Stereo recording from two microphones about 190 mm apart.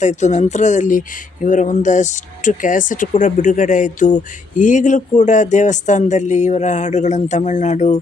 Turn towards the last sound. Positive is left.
turn(degrees=40)  # may be behind; listen again after turning